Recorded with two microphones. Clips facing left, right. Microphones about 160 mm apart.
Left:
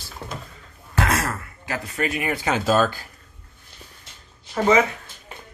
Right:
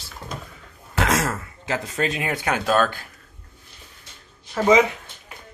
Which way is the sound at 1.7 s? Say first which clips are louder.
Right 2 dB; 20° right (ahead or behind).